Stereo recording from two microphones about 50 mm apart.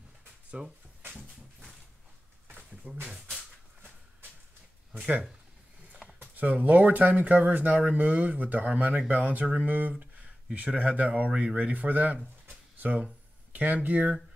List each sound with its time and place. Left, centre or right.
0.6 s speech: right
2.7 s a sound: centre
6.3 s speech: right